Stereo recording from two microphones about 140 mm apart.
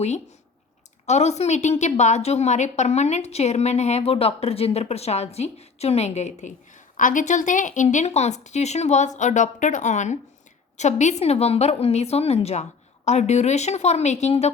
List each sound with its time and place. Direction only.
1.0 s a woman's voice: 50° left (ahead or behind)
6.9 s a woman's voice: 70° left (ahead or behind); by 14.5 s 50° left (ahead or behind)